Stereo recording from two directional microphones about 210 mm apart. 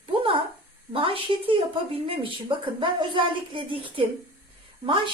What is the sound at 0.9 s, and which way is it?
A woman's voice, 25° right (ahead or behind).